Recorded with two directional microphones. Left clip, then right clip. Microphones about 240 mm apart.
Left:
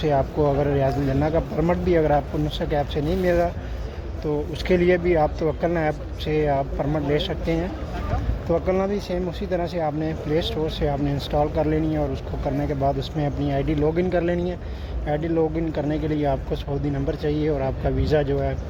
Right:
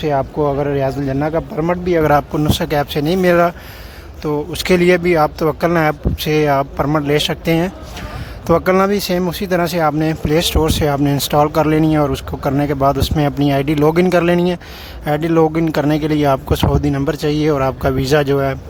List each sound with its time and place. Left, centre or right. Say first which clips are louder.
0.0 s speech: right 4 dB; right